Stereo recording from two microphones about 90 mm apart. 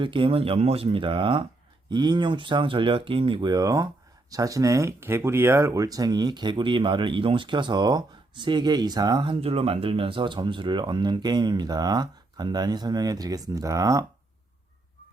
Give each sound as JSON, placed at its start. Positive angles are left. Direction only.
{"t": 0.0, "sound": "speech", "side_deg": -70}
{"t": 1.9, "sound": "speech", "side_deg": -55}
{"t": 3.5, "sound": "speech", "side_deg": -40}
{"t": 9.3, "sound": "speech", "side_deg": -90}